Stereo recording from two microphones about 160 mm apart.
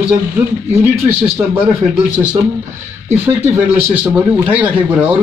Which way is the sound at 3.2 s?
15° right (ahead or behind).